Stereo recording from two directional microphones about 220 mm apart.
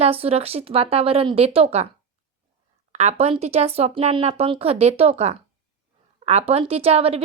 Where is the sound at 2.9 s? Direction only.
30° right (ahead or behind).